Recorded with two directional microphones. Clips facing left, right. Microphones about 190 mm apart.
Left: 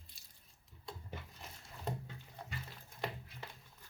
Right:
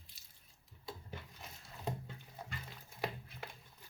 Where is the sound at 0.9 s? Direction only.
5° right (ahead or behind).